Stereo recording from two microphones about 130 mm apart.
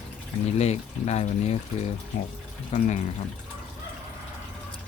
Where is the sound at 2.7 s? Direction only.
65° left (ahead or behind).